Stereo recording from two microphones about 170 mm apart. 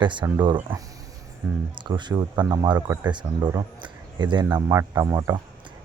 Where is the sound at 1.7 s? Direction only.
25° right (ahead or behind).